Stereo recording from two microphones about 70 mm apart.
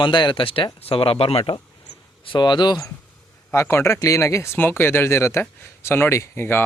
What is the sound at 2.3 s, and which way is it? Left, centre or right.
Speech, left.